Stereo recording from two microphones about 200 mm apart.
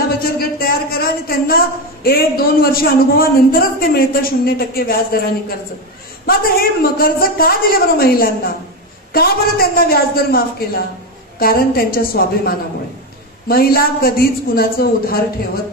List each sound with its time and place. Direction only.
0.2 s a man's voice: 50° left (ahead or behind)